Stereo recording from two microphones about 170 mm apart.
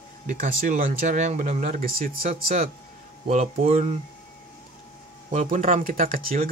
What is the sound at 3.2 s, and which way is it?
Speech, 40° right (ahead or behind).